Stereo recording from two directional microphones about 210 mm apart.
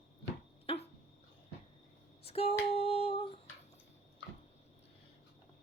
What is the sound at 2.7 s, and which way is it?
Humming, 30° left (ahead or behind).